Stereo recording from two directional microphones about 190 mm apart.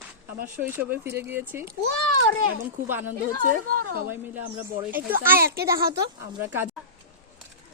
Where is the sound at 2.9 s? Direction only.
10° right (ahead or behind).